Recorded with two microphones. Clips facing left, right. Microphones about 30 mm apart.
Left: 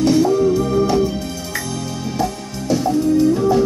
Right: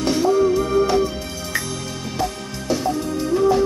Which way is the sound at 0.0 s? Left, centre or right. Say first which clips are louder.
Left 3 dB; centre.